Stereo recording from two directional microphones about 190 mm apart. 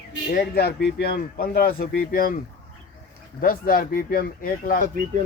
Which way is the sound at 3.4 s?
50° left (ahead or behind).